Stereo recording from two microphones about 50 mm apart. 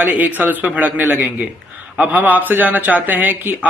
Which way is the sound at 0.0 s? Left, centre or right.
Right.